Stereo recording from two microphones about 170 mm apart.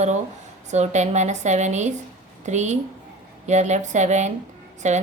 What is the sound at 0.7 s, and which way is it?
A woman's voice, 45° right (ahead or behind).